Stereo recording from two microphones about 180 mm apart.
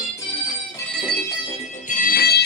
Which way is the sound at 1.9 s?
55° left (ahead or behind).